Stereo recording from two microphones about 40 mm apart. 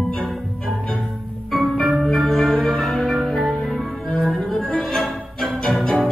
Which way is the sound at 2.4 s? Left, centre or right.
Centre.